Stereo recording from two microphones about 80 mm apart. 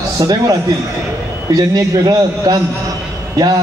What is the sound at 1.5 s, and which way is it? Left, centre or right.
A man's voice, right.